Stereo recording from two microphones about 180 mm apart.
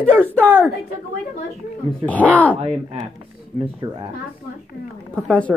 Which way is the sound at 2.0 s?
10° left (ahead or behind).